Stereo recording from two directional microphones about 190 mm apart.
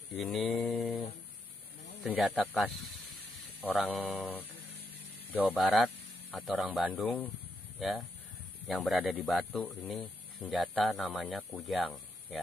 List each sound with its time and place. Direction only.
0.1 s mantra: centre (ahead or behind)
2.0 s speech: centre (ahead or behind)